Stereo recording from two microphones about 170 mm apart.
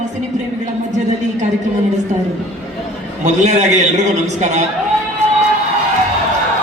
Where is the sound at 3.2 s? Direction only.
45° right (ahead or behind).